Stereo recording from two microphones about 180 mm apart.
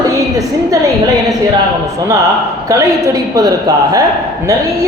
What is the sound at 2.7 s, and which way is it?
A woman's voice, 20° right (ahead or behind).